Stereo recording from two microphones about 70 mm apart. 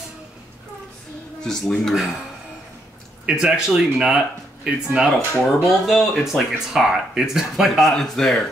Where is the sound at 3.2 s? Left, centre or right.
Centre.